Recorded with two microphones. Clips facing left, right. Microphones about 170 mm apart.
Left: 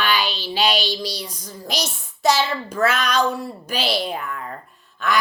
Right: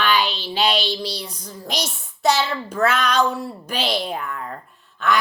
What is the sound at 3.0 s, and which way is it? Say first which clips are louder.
Speech: right 1 dB; 10° left (ahead or behind).